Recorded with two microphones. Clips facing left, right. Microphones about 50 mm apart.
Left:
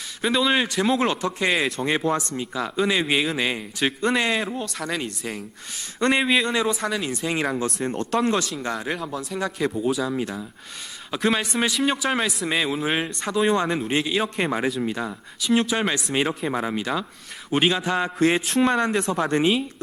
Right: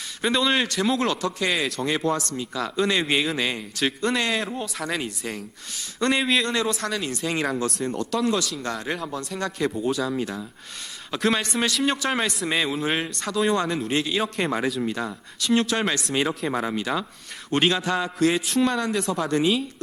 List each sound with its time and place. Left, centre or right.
0.2 s a man's voice: centre; by 1.5 s left
1.8 s a man's voice: centre
4.4 s speech: centre
6.0 s music: centre
6.2 s a man's voice: centre
7.9 s speech: left
8.5 s a man's voice: centre
18.0 s music: left
18.6 s speech: left
19.1 s music: left